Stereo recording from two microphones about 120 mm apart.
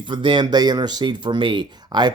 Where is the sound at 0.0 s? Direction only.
40° right (ahead or behind).